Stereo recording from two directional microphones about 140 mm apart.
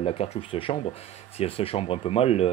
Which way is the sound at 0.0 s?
45° left (ahead or behind).